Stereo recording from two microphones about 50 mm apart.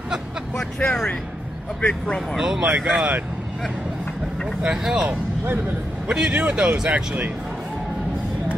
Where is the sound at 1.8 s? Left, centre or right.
Left.